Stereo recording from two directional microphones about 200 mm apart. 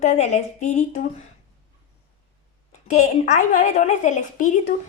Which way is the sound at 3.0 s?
35° left (ahead or behind).